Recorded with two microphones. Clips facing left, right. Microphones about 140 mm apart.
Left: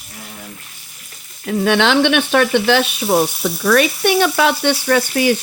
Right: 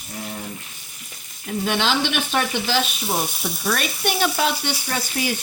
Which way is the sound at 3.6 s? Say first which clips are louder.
Left 10 dB; 90° left.